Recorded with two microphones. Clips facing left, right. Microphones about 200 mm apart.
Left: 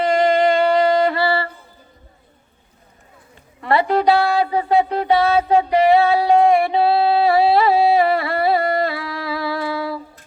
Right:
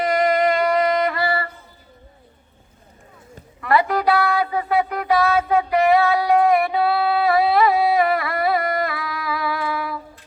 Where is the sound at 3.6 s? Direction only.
30° left (ahead or behind).